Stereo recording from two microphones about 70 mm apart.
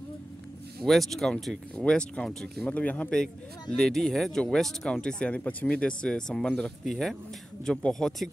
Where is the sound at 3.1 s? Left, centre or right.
Centre.